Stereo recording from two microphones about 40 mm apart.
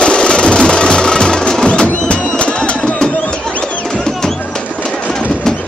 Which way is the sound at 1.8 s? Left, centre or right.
Left.